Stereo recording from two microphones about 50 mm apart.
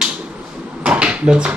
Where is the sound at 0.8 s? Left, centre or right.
Centre.